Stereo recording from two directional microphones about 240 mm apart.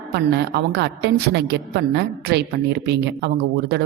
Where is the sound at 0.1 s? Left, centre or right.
Right.